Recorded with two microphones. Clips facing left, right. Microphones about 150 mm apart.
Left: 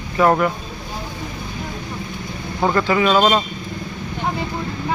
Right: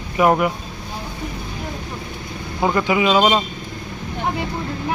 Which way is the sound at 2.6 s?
15° right (ahead or behind).